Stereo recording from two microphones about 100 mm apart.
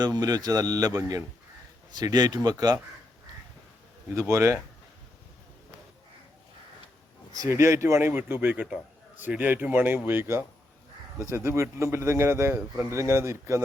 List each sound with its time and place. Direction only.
0.0 s a man's voice: 40° right (ahead or behind)
4.1 s a man's voice: 30° right (ahead or behind)
7.3 s a man's voice: 30° right (ahead or behind)